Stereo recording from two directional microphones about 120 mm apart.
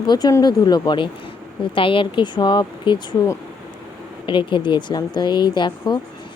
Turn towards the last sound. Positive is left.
turn(degrees=40)  # may be behind; listen again after turning